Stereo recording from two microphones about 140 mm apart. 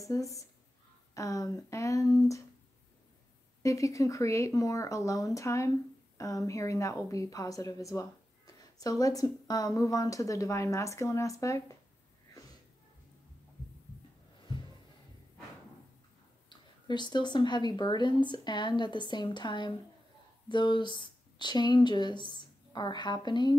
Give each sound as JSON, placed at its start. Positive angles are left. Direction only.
{"t": 0.0, "sound": "a woman's voice", "side_deg": 25}
{"t": 3.6, "sound": "a woman's voice", "side_deg": 25}
{"t": 16.4, "sound": "a woman's voice", "side_deg": 30}